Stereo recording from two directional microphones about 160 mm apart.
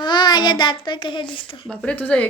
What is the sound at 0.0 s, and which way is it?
A child's voice, 30° left (ahead or behind).